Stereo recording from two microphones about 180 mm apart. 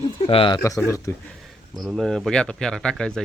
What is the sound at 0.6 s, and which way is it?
Speech, 15° left (ahead or behind).